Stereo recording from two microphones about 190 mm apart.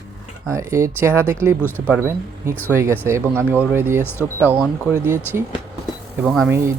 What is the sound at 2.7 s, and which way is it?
Speech, 15° right (ahead or behind).